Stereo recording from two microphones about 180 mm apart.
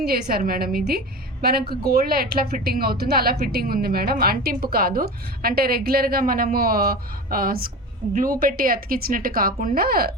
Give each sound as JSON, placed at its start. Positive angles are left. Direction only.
{"t": 0.0, "sound": "a woman's voice", "side_deg": -60}